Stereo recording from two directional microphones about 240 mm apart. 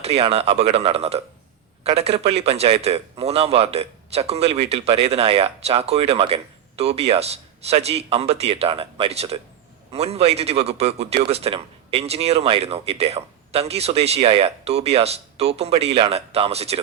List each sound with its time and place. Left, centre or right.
0.0 s speech: right